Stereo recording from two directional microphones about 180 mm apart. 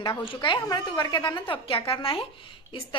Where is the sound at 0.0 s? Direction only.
25° left (ahead or behind).